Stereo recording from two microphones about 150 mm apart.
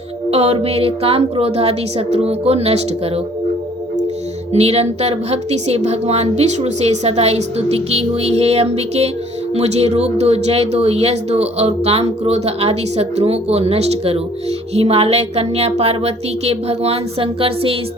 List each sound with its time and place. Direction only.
0.3 s speech: 45° right (ahead or behind)
4.5 s speech: 45° right (ahead or behind)